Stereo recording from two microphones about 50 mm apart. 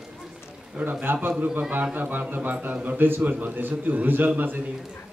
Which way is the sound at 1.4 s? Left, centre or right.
Right.